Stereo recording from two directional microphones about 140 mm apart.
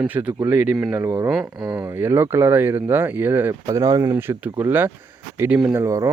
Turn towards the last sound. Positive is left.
turn(degrees=-25)  # may be behind; listen again after turning